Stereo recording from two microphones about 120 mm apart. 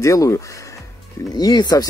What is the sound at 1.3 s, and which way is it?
Speech, 35° left (ahead or behind).